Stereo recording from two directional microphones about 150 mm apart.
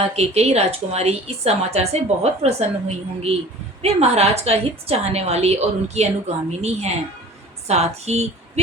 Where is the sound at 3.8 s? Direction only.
45° right (ahead or behind).